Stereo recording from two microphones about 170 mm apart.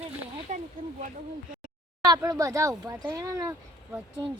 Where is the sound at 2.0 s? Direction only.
20° right (ahead or behind).